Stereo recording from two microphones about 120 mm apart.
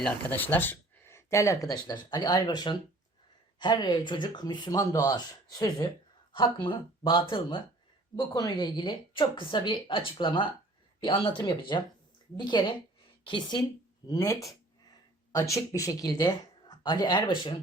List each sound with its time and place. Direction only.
0.0 s speech: 15° left (ahead or behind); by 5.9 s 35° left (ahead or behind)
6.3 s speech: 45° left (ahead or behind)
8.1 s speech: 30° left (ahead or behind)